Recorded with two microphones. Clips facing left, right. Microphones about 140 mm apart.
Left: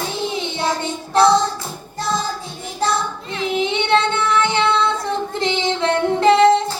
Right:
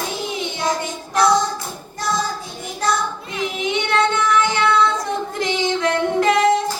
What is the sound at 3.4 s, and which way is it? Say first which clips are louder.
Child singing: left 3 dB; 30° left (ahead or behind).